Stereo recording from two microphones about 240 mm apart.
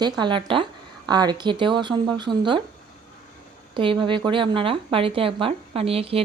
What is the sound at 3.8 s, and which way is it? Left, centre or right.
Speech, right.